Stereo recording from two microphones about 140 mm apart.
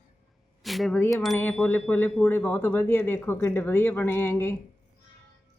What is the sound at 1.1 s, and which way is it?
Speech, centre (ahead or behind).